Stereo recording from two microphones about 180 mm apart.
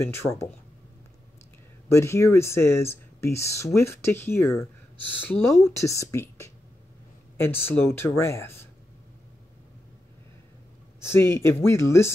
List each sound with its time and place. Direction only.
0.0 s speech: 15° left (ahead or behind)
1.9 s speech: 15° left (ahead or behind)
5.8 s speech: 15° left (ahead or behind)
11.0 s speech: 15° left (ahead or behind)